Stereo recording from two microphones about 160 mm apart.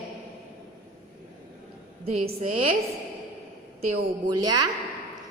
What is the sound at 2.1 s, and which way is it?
Speech, 40° right (ahead or behind).